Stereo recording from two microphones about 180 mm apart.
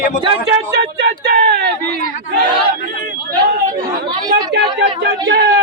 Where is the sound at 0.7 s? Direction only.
65° right (ahead or behind).